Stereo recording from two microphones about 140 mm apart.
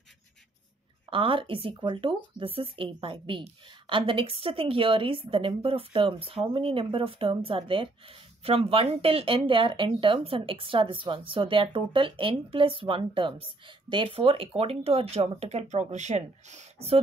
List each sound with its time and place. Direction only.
1.1 s speech: 40° right (ahead or behind)